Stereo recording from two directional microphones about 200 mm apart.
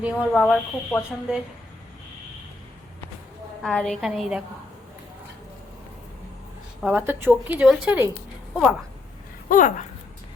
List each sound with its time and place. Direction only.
0.0 s speech: centre (ahead or behind)
3.6 s speech: 5° left (ahead or behind)
6.8 s a woman's voice: 10° right (ahead or behind)
9.5 s speech: 40° left (ahead or behind)